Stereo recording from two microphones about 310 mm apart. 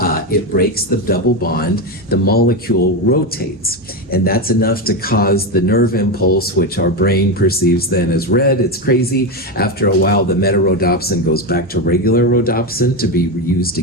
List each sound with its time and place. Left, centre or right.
0.0 s speech: left